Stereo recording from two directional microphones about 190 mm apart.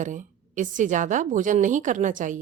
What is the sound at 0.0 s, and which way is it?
A woman's voice, 40° right (ahead or behind).